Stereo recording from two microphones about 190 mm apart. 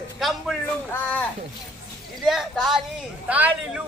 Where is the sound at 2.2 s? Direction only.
Centre (ahead or behind).